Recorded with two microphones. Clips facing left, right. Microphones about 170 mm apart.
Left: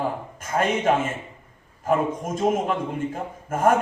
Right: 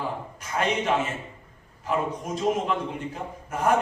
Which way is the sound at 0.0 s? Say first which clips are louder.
Left 4 dB; 50° left (ahead or behind).